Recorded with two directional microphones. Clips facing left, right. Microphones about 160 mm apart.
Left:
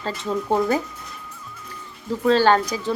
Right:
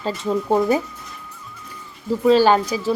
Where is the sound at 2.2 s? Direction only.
10° right (ahead or behind).